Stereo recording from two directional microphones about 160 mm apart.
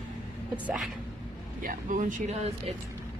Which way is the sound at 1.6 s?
55° right (ahead or behind).